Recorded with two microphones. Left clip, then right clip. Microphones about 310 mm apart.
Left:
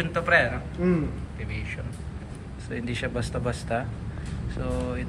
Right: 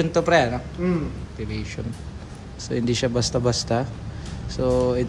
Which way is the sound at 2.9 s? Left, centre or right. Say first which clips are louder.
Right 8 dB; centre.